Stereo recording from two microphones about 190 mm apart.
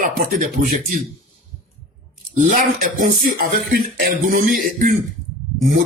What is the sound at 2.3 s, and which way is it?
Speech, 40° right (ahead or behind).